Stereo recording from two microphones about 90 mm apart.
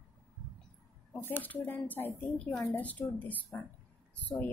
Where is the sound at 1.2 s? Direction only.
20° left (ahead or behind).